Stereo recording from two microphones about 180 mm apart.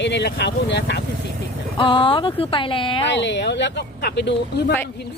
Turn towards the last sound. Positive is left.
turn(degrees=75)  # may be behind; listen again after turning